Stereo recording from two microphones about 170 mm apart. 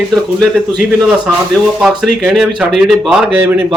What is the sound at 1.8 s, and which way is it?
A man's voice, centre (ahead or behind).